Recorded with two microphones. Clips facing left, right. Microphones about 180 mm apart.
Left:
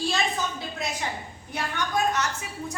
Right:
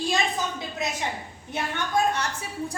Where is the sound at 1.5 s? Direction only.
30° right (ahead or behind).